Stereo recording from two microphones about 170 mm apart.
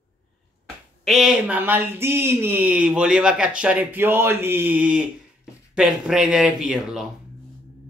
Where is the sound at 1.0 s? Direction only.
Centre (ahead or behind).